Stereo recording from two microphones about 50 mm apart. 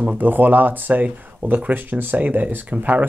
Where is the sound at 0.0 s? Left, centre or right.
Right.